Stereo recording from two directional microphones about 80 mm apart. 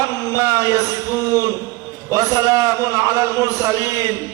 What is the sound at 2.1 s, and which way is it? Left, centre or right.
A man's voice, right.